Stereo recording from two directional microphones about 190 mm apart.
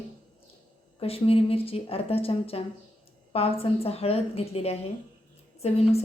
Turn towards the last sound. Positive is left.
turn(degrees=35)  # may be behind; listen again after turning